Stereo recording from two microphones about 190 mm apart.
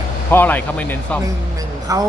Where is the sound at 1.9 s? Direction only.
15° right (ahead or behind).